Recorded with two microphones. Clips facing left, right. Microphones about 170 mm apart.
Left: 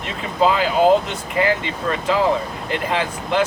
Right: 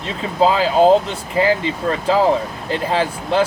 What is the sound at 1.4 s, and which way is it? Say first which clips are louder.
Speech: right 3 dB; 25° right (ahead or behind).